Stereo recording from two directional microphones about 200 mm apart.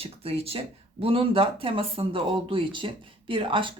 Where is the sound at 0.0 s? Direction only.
30° right (ahead or behind).